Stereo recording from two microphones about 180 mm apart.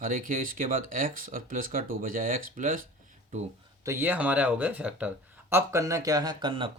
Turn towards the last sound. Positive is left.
turn(degrees=-25)  # may be behind; listen again after turning